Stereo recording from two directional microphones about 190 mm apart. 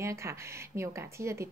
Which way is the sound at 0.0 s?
15° right (ahead or behind).